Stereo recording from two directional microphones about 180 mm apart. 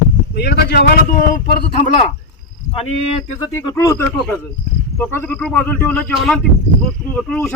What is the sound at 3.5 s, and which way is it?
Speech, 15° left (ahead or behind).